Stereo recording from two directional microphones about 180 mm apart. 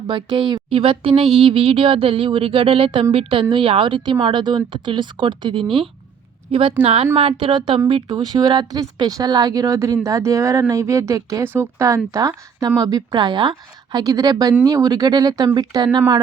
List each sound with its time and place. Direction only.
0.1 s a woman's voice: 25° right (ahead or behind)